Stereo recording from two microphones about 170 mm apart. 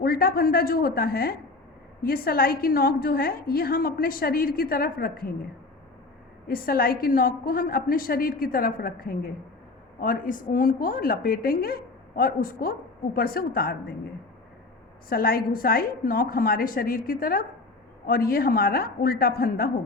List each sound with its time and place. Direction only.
0.0 s a woman's voice: 60° left (ahead or behind)
6.5 s a woman's voice: 60° left (ahead or behind)
15.1 s a woman's voice: 60° left (ahead or behind)